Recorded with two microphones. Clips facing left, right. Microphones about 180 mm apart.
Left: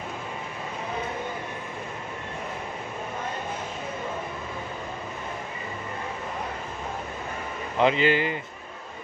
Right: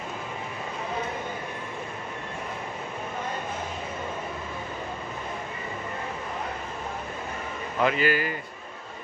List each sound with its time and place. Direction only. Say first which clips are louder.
7.8 s speech: left 3 dB; 20° left (ahead or behind)